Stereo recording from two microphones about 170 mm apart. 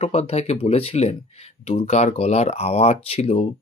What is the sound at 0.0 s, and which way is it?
Speech, 35° left (ahead or behind).